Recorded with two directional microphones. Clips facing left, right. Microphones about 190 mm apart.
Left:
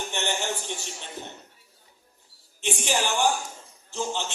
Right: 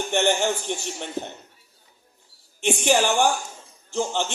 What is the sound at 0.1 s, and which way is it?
Speech, 50° right (ahead or behind).